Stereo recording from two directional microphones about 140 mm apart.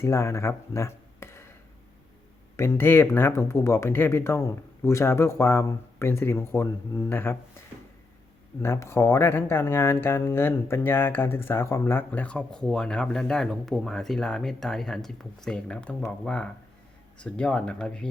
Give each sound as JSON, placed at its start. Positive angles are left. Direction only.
{"t": 0.0, "sound": "speech", "side_deg": 20}
{"t": 2.6, "sound": "speech", "side_deg": 15}
{"t": 8.6, "sound": "speech", "side_deg": 20}